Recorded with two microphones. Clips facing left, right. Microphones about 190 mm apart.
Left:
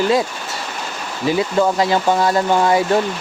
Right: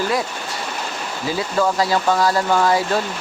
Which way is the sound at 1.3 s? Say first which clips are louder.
Left 4 dB; 20° left (ahead or behind).